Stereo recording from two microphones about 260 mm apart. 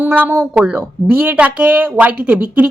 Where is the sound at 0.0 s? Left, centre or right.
Centre.